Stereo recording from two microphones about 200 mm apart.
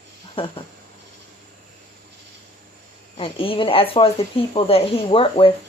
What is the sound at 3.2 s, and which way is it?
Speech, 25° left (ahead or behind).